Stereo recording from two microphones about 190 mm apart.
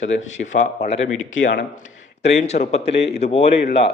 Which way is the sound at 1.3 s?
75° left (ahead or behind).